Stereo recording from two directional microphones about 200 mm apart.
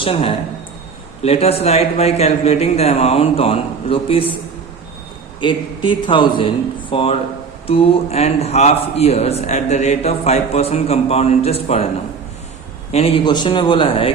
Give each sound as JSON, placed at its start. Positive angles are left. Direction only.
{"t": 0.0, "sound": "a man's voice", "side_deg": 25}
{"t": 5.4, "sound": "a man's voice", "side_deg": 25}
{"t": 12.9, "sound": "a man's voice", "side_deg": 30}